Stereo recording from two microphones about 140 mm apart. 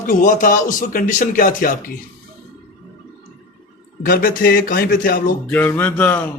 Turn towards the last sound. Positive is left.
turn(degrees=15)  # may be behind; listen again after turning